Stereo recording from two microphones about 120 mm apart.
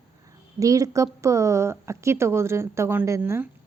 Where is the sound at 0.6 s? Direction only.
30° right (ahead or behind).